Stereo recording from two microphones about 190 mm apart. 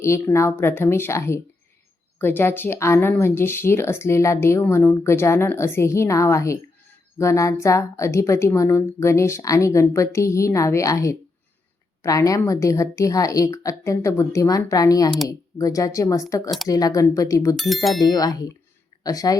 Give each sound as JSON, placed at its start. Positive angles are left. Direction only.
{"t": 0.0, "sound": "speech", "side_deg": 15}